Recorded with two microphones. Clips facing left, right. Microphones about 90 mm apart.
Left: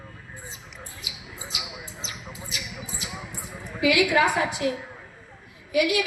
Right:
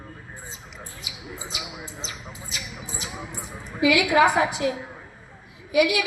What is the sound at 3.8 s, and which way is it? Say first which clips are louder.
A woman's voice: right 2 dB; 25° right (ahead or behind).